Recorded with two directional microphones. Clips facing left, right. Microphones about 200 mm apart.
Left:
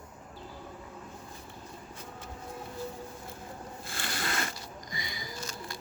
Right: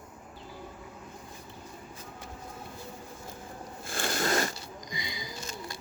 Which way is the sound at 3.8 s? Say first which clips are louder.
Right 7 dB; 50° right (ahead or behind).